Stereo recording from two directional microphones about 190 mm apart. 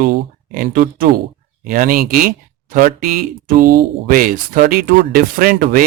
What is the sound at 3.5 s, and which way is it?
Speech, 50° right (ahead or behind).